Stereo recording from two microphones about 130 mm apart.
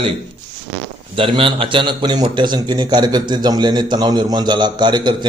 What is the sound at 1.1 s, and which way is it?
A man's voice, 40° right (ahead or behind).